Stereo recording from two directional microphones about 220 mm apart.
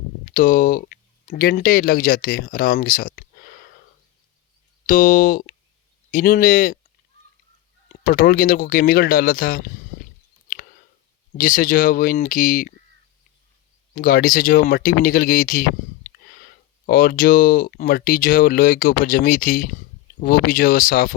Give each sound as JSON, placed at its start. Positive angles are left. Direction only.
{"t": 0.3, "sound": "speech", "side_deg": 40}
{"t": 4.9, "sound": "speech", "side_deg": 40}
{"t": 8.0, "sound": "speech", "side_deg": 40}
{"t": 10.5, "sound": "a sound", "side_deg": 40}
{"t": 11.3, "sound": "speech", "side_deg": 40}
{"t": 13.9, "sound": "speech", "side_deg": 40}